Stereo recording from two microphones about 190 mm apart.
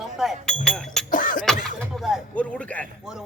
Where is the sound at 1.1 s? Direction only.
45° left (ahead or behind).